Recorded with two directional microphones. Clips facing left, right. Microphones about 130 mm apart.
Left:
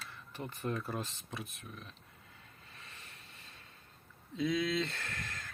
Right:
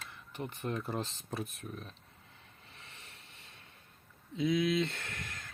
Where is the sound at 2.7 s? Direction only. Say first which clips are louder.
Even; 25° right (ahead or behind).